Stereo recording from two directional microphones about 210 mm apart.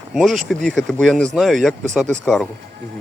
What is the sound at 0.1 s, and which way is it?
Speech, centre (ahead or behind).